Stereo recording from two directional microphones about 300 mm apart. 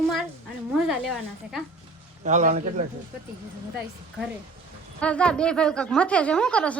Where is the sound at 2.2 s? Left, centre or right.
Right.